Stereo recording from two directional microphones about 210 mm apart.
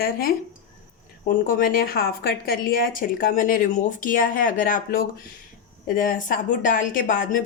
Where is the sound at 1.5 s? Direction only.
40° left (ahead or behind).